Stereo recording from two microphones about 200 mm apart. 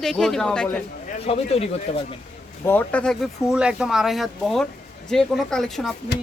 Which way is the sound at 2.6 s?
10° left (ahead or behind).